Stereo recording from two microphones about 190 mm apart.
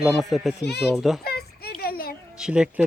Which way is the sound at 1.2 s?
55° left (ahead or behind).